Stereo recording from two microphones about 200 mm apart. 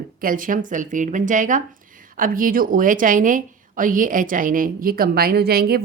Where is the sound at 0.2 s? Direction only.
45° right (ahead or behind).